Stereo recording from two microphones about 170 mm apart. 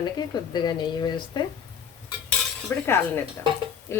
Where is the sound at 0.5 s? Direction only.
25° left (ahead or behind).